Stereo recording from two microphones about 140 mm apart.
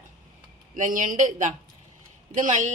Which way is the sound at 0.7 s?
70° right (ahead or behind).